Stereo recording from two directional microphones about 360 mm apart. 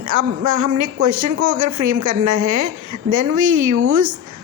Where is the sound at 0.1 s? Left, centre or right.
Right.